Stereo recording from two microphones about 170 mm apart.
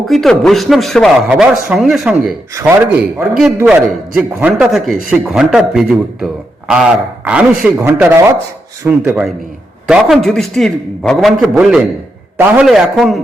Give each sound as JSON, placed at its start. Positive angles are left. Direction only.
{"t": 0.1, "sound": "a man's voice", "side_deg": 0}